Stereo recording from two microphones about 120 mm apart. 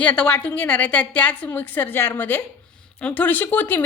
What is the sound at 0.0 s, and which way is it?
A woman's voice, 10° left (ahead or behind).